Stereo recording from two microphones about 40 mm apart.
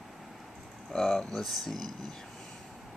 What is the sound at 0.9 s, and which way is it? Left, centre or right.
Speech, centre.